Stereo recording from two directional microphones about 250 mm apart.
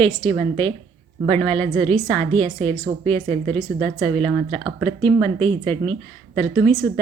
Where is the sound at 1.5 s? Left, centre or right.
Right.